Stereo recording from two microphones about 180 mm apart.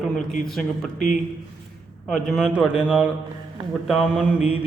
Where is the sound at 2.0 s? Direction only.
Centre (ahead or behind).